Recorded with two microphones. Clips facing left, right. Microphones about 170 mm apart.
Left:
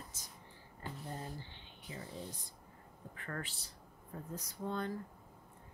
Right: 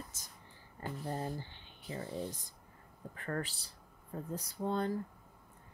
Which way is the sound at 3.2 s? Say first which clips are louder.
Right 6 dB; 40° right (ahead or behind).